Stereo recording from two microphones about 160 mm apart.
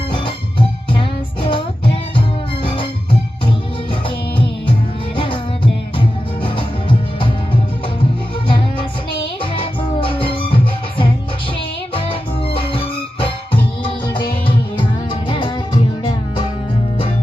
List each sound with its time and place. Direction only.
1.5 s music: 30° left (ahead or behind)
5.1 s music: 35° left (ahead or behind)
8.4 s music: 35° left (ahead or behind)
12.5 s music: 35° left (ahead or behind)
15.3 s music: 30° left (ahead or behind)